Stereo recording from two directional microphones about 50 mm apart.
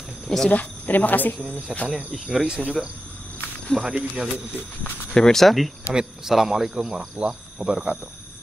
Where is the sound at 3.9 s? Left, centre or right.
Centre.